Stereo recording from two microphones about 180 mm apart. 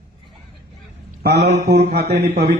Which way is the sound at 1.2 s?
70° right (ahead or behind).